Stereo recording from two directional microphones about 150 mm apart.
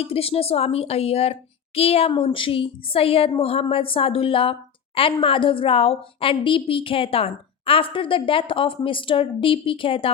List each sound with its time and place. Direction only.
0.0 s a woman's voice: 40° left (ahead or behind)